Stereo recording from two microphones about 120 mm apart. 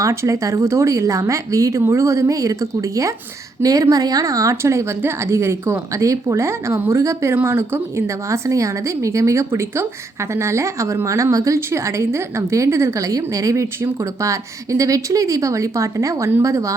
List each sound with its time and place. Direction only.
0.0 s speech: 25° right (ahead or behind)